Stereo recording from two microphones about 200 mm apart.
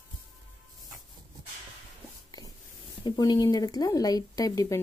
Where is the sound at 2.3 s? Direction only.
20° left (ahead or behind).